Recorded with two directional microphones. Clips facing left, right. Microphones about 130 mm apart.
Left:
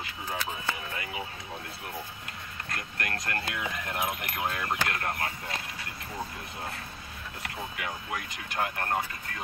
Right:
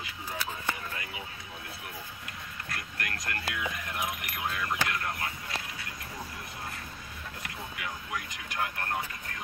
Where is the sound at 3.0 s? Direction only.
40° left (ahead or behind).